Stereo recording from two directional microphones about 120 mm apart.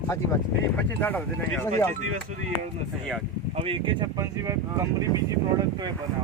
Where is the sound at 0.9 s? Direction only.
15° left (ahead or behind).